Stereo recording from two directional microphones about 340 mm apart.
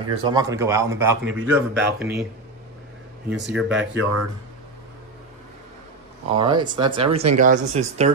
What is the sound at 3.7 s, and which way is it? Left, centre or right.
Speech, right.